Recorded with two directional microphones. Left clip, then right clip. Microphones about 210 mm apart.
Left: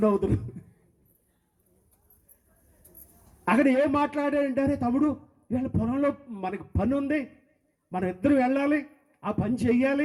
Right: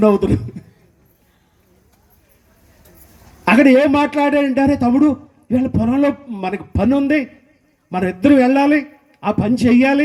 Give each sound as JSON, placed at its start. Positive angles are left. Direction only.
{"t": 0.0, "sound": "a man's voice", "side_deg": -40}
{"t": 3.4, "sound": "a man's voice", "side_deg": -40}